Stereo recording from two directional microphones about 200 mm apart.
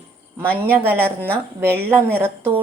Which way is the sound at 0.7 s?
10° right (ahead or behind).